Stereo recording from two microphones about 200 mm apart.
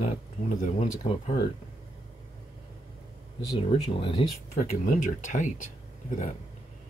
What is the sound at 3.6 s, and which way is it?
Speech, 30° left (ahead or behind).